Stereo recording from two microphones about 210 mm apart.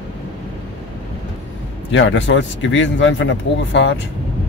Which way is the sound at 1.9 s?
60° left (ahead or behind).